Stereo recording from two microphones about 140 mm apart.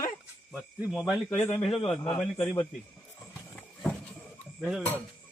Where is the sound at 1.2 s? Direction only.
10° left (ahead or behind).